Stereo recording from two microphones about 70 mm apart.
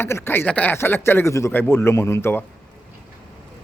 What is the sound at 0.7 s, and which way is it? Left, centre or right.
A man's voice, left.